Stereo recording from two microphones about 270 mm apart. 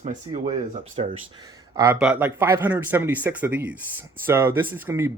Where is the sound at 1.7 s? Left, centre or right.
Centre.